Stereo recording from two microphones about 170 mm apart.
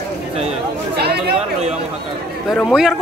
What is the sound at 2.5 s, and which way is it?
Speech, centre (ahead or behind).